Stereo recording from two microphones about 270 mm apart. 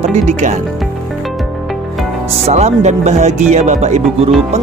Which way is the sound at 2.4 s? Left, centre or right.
Right.